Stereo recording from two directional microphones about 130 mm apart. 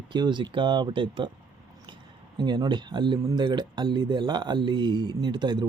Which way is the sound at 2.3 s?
35° right (ahead or behind).